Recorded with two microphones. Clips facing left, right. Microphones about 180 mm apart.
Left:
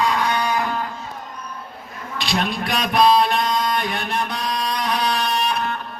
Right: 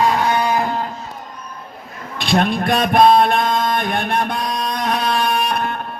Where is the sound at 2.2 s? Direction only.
50° right (ahead or behind).